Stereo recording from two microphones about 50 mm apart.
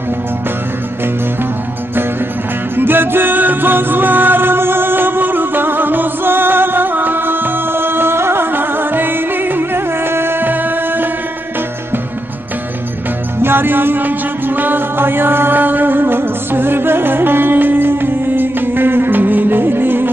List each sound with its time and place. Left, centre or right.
2.7 s music: right
13.4 s music: right